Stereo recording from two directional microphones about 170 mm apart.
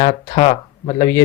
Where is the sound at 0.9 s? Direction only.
20° left (ahead or behind).